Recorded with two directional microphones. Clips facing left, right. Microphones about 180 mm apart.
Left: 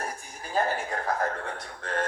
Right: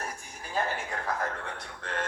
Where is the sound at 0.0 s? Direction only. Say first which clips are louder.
Left 3 dB; 35° left (ahead or behind).